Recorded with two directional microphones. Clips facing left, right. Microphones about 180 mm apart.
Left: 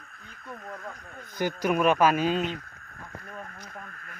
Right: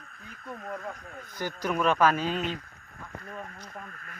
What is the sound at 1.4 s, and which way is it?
Speech, 15° left (ahead or behind).